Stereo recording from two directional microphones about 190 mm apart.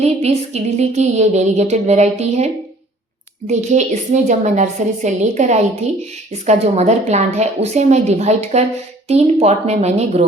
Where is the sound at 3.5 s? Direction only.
40° right (ahead or behind).